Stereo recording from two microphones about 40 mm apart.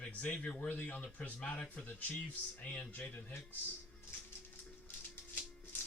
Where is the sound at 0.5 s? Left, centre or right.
Left.